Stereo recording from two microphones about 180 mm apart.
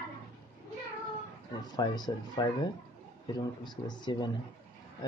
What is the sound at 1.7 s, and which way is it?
Speech, 25° left (ahead or behind).